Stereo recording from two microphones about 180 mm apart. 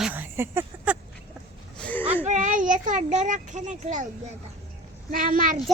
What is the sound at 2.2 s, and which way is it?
A child's voice, 45° right (ahead or behind).